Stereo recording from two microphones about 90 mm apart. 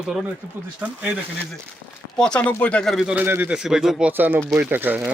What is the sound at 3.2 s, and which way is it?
Speech, 25° right (ahead or behind).